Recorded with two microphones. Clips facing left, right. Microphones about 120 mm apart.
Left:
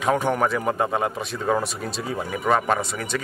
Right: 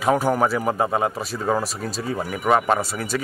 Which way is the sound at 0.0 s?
5° right (ahead or behind).